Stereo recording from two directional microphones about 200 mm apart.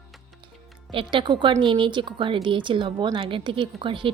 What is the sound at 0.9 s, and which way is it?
Speech, 25° right (ahead or behind).